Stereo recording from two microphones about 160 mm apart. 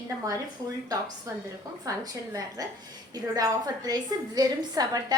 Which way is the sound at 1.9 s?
20° right (ahead or behind).